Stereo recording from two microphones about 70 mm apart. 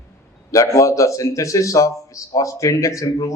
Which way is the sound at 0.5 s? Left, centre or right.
Left.